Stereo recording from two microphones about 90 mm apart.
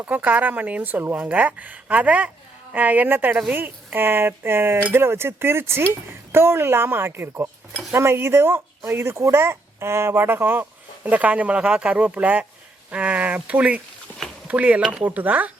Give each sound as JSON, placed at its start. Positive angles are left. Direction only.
{"t": 0.0, "sound": "speech", "side_deg": -20}
{"t": 15.0, "sound": "speech", "side_deg": -15}